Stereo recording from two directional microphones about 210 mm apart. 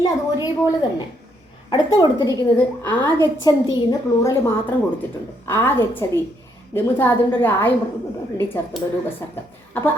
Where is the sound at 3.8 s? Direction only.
15° left (ahead or behind).